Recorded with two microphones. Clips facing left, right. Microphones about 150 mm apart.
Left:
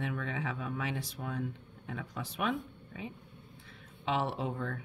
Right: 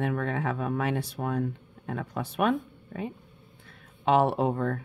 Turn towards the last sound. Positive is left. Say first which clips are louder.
# right 9 dB
turn(degrees=-60)  # may be behind; listen again after turning